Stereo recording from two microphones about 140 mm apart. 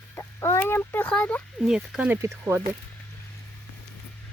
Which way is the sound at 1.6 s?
Centre (ahead or behind).